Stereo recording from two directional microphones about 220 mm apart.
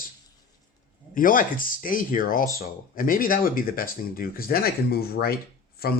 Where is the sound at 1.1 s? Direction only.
40° left (ahead or behind).